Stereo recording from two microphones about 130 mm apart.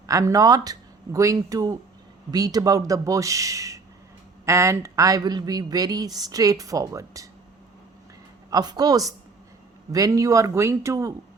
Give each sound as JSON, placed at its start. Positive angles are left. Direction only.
{"t": 0.1, "sound": "speech", "side_deg": -25}
{"t": 8.4, "sound": "speech", "side_deg": -30}